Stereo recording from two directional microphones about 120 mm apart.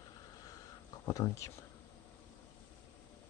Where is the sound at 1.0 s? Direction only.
25° left (ahead or behind).